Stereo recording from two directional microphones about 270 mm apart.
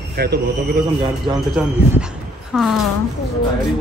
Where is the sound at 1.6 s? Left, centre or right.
Centre.